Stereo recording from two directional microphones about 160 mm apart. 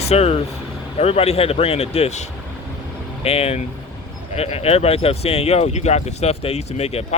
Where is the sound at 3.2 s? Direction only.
40° left (ahead or behind).